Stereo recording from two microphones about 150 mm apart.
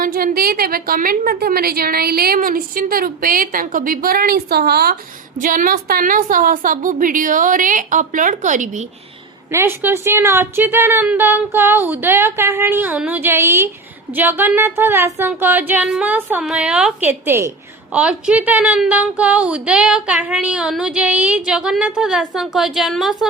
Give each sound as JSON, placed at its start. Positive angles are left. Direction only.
{"t": 0.0, "sound": "a woman's voice", "side_deg": -70}
{"t": 5.4, "sound": "a woman's voice", "side_deg": -65}
{"t": 9.5, "sound": "a woman's voice", "side_deg": -15}